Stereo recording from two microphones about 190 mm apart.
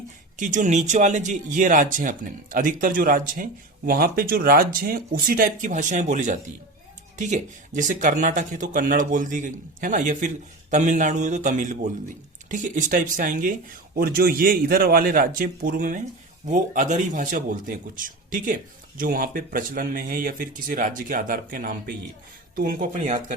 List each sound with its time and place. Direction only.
0.3 s speech: 40° right (ahead or behind)